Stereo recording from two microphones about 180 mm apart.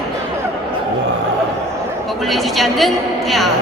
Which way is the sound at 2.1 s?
Centre (ahead or behind).